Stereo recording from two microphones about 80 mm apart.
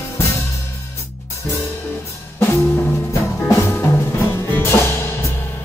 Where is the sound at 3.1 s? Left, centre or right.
Left.